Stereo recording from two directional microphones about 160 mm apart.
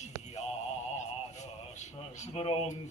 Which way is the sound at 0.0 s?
45° left (ahead or behind).